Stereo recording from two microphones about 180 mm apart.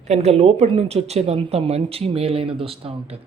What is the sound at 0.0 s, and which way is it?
Speech, 35° right (ahead or behind).